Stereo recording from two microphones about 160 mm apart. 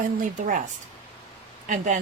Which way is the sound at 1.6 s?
50° right (ahead or behind).